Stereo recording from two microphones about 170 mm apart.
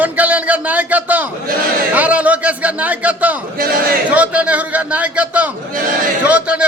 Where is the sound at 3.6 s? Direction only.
55° right (ahead or behind).